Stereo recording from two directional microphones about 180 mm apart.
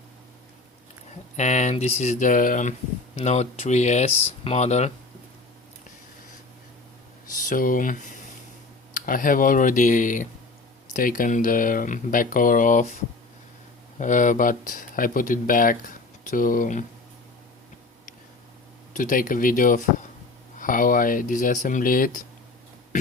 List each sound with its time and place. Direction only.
1.4 s speech: 40° left (ahead or behind)
7.3 s speech: 50° left (ahead or behind)
14.0 s speech: 45° left (ahead or behind)
18.9 s speech: 45° left (ahead or behind)